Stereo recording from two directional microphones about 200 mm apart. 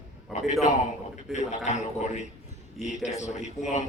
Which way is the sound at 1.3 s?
35° left (ahead or behind).